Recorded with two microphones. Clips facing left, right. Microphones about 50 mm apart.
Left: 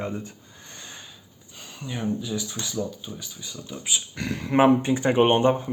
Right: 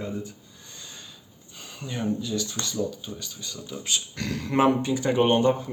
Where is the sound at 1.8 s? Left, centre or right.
Centre.